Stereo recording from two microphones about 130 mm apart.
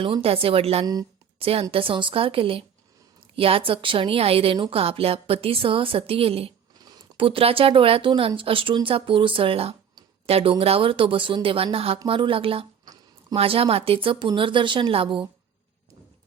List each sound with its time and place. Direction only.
0.0 s a woman's voice: 45° right (ahead or behind)
6.7 s a sound: 30° right (ahead or behind)
7.2 s a woman's voice: 45° right (ahead or behind)